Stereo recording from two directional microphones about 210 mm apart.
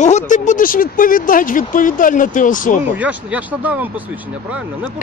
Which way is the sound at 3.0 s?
5° right (ahead or behind).